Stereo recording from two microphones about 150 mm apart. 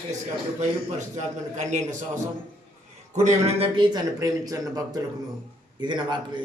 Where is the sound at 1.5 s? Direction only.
55° right (ahead or behind).